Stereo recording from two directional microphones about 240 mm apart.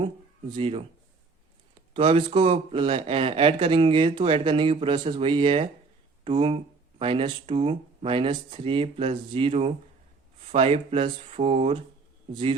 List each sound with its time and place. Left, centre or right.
0.5 s speech: right
1.9 s speech: right